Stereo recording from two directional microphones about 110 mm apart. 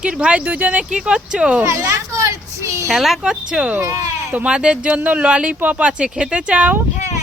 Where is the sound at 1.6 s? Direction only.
30° right (ahead or behind).